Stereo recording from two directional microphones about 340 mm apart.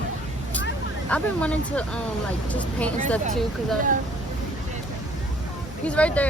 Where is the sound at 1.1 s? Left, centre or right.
Centre.